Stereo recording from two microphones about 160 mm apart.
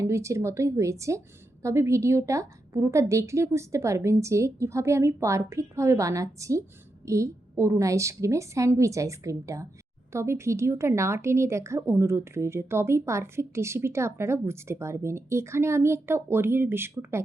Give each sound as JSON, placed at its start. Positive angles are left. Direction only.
{"t": 0.0, "sound": "a woman's voice", "side_deg": -20}